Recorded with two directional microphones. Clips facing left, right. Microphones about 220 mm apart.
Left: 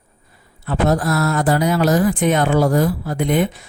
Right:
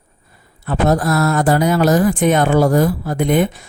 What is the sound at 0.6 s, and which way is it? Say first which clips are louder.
Speech: right 2 dB; 50° right (ahead or behind).